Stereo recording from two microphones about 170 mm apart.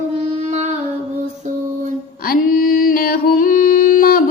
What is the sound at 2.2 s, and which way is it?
Music, 55° left (ahead or behind).